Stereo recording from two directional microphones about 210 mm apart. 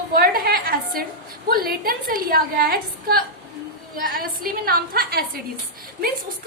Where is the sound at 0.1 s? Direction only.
45° right (ahead or behind).